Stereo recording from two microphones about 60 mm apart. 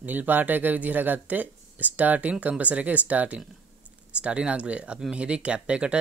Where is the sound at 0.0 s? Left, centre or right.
Right.